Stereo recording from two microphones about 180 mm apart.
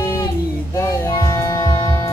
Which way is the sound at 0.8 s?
15° left (ahead or behind).